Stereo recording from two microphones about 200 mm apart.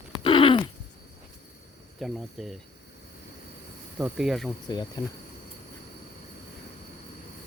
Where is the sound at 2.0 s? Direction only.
Centre (ahead or behind).